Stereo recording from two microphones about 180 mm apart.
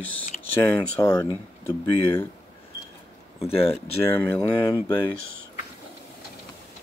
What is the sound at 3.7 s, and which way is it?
Speech, 10° left (ahead or behind).